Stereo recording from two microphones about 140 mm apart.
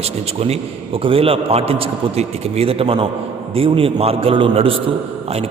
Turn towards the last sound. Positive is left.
turn(degrees=-40)  # may be behind; listen again after turning